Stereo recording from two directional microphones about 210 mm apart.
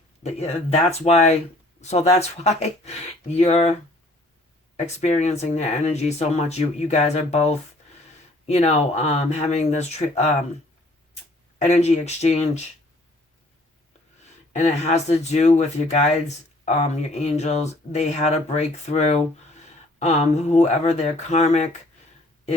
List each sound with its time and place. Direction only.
0.2 s speech: 30° left (ahead or behind)
4.9 s speech: 30° left (ahead or behind)
11.6 s speech: 30° left (ahead or behind)
14.5 s speech: 35° left (ahead or behind)